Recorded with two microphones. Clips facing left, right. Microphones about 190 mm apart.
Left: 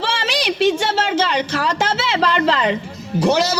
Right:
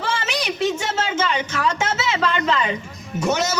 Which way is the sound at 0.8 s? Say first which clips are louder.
Left 4 dB; 30° left (ahead or behind).